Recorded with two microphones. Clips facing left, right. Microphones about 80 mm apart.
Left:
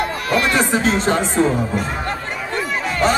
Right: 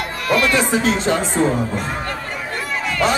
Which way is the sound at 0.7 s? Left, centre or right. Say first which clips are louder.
Left 1 dB; left.